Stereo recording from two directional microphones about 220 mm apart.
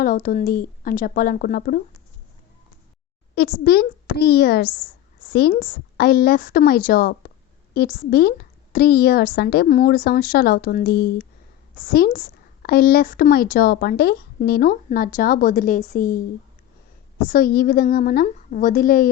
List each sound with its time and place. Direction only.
0.0 s a woman's voice: 40° left (ahead or behind)
3.3 s a woman's voice: 45° left (ahead or behind)
17.2 s a woman's voice: 40° left (ahead or behind)